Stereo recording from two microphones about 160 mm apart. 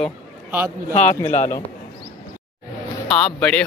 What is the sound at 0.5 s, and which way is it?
Speech, 10° right (ahead or behind).